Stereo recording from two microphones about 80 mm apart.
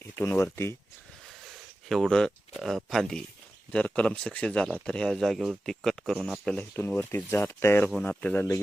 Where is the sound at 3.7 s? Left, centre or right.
Centre.